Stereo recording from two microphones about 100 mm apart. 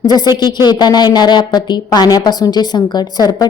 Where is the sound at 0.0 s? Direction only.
40° left (ahead or behind).